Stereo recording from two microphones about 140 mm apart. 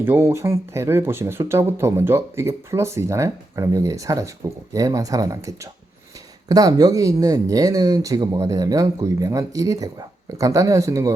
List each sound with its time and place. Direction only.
0.0 s speech: 15° right (ahead or behind)